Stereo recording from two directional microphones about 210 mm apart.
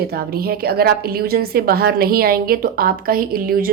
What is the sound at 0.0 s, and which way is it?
A woman's voice, 45° right (ahead or behind).